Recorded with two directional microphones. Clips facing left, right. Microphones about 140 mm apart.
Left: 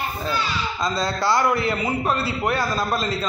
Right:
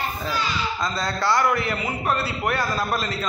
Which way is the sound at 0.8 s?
20° left (ahead or behind).